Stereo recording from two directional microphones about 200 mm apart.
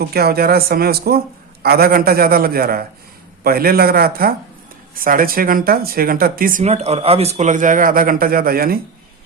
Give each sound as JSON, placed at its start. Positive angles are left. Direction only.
{"t": 0.1, "sound": "speech", "side_deg": -50}